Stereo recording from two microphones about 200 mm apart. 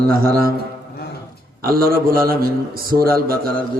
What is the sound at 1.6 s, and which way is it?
Mantra, 50° right (ahead or behind).